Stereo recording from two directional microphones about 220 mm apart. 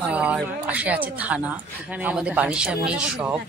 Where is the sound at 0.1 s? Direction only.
5° right (ahead or behind).